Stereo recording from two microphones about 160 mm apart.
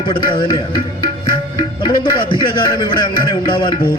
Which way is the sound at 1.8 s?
30° left (ahead or behind).